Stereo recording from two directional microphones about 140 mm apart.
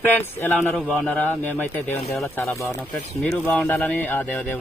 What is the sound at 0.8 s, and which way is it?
Speech, 5° right (ahead or behind).